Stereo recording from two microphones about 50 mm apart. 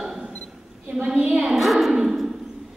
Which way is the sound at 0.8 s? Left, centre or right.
Right.